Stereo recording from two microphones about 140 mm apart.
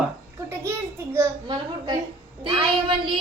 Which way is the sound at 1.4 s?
35° right (ahead or behind).